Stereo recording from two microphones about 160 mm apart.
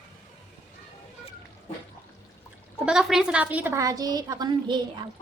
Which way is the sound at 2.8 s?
5° right (ahead or behind).